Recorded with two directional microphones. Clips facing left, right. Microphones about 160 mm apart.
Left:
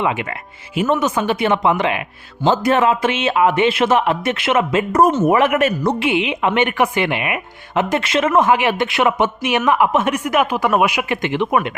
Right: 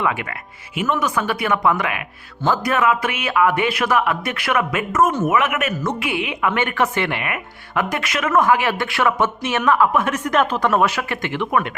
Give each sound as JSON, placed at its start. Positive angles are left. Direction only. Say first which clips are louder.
{"t": 0.0, "sound": "speech", "louder": "left 2 dB", "side_deg": 20}
{"t": 10.2, "sound": "speech", "louder": "left 1 dB", "side_deg": 10}